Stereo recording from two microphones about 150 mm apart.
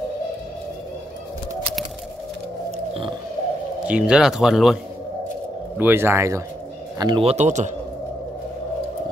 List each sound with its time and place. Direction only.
2.9 s a sound: 35° right (ahead or behind)
3.8 s speech: 5° right (ahead or behind)
5.8 s speech: 15° right (ahead or behind)
7.0 s speech: 30° right (ahead or behind)
7.2 s a man's voice: 50° right (ahead or behind)